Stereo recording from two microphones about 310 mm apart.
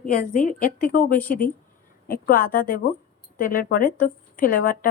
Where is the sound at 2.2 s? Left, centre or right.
Left.